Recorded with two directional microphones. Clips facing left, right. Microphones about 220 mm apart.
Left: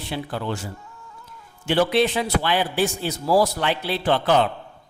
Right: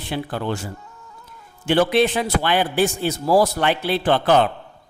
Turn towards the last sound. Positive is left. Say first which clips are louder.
# right 3 dB
turn(degrees=-55)  # may be behind; listen again after turning